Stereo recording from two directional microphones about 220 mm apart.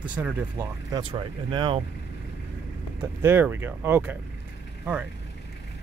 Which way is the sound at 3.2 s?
10° right (ahead or behind).